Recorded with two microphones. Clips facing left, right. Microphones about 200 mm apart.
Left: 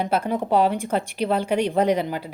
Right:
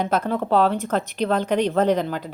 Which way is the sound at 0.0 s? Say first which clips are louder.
Right 1 dB; 10° left (ahead or behind).